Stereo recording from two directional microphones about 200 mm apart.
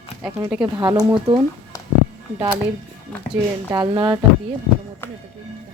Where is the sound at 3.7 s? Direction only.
20° right (ahead or behind).